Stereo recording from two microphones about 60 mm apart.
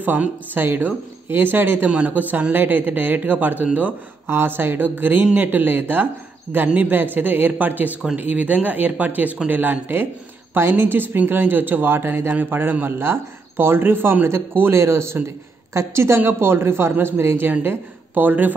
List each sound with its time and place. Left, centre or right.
0.0 s speech: right
1.9 s a man's voice: right
17.5 s speech: right